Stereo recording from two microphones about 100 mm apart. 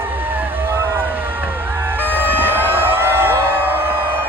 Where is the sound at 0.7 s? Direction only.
25° right (ahead or behind).